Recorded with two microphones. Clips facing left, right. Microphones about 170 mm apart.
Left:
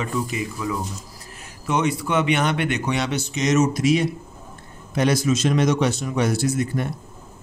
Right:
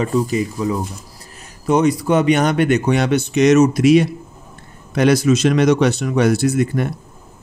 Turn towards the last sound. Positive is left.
turn(degrees=-65)  # may be behind; listen again after turning